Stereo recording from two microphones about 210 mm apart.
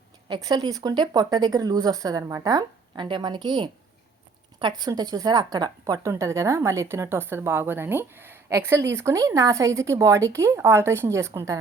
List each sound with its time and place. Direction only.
0.3 s a woman's voice: 20° right (ahead or behind)